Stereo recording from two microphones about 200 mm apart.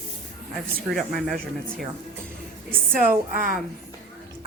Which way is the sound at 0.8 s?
Centre (ahead or behind).